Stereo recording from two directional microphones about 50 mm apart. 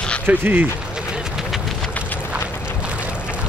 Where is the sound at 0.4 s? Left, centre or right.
Right.